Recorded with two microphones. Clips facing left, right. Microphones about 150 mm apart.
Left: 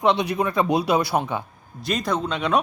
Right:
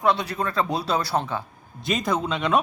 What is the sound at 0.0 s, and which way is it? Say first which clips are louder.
A man's voice: left 3 dB; 20° left (ahead or behind).